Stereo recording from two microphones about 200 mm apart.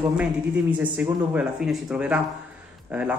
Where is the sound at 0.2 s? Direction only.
5° right (ahead or behind).